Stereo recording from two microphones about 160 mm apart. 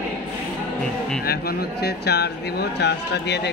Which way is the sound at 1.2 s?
85° left.